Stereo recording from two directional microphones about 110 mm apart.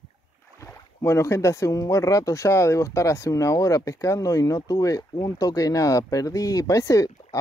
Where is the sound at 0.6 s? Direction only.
25° left (ahead or behind).